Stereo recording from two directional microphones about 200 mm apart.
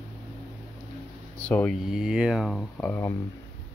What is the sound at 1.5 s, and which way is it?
Speech, 5° left (ahead or behind).